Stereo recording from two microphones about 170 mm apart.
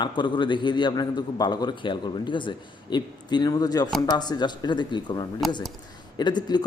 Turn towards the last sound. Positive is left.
turn(degrees=25)  # may be behind; listen again after turning